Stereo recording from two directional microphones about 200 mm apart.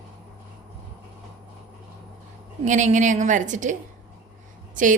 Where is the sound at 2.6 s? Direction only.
40° right (ahead or behind).